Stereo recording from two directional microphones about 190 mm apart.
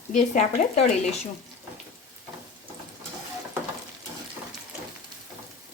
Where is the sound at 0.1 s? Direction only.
40° left (ahead or behind).